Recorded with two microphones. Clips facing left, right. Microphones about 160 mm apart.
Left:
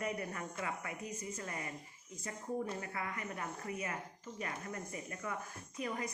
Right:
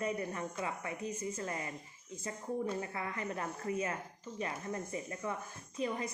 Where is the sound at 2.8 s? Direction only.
25° right (ahead or behind).